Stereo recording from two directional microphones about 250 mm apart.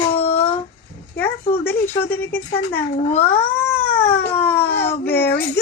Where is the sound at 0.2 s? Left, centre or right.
Left.